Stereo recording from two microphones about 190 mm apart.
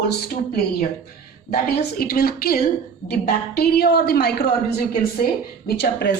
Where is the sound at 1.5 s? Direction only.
55° left (ahead or behind).